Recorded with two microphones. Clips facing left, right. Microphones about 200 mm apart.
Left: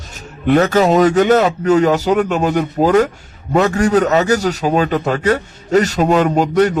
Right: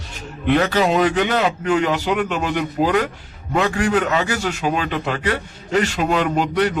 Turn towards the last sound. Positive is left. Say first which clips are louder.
# left 5 dB
turn(degrees=45)  # may be behind; listen again after turning